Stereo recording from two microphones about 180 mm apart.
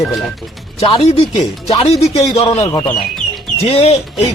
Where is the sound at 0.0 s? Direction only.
Centre (ahead or behind).